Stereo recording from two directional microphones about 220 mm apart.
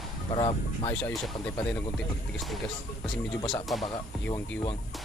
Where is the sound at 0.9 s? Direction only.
10° left (ahead or behind).